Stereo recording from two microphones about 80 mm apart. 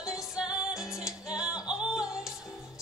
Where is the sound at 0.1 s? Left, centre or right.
Centre.